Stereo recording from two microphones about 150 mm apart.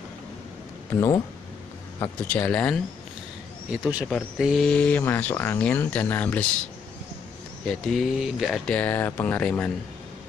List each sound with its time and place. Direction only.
0.9 s speech: 20° left (ahead or behind)
4.4 s speech: centre (ahead or behind)
7.6 s speech: centre (ahead or behind)